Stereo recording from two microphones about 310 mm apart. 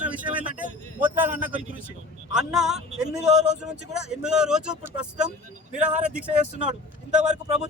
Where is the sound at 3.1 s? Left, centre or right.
Right.